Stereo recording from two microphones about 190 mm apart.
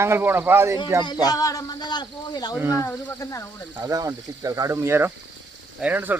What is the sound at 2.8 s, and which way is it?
Speech, 15° left (ahead or behind).